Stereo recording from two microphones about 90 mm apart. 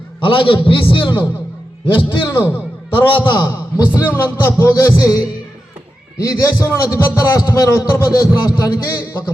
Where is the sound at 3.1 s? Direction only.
60° left (ahead or behind).